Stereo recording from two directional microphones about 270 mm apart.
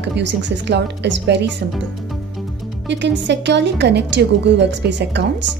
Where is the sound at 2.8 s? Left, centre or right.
Right.